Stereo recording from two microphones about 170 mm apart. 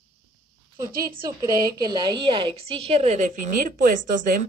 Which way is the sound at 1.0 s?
20° right (ahead or behind).